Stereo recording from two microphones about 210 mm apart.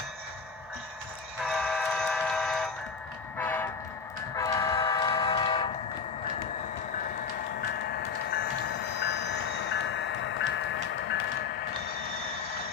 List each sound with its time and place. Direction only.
1.5 s train: centre (ahead or behind); by 5.6 s 20° left (ahead or behind)
9.0 s train: 60° left (ahead or behind)